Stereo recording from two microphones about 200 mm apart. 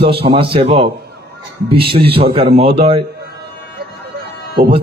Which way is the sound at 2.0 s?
30° right (ahead or behind).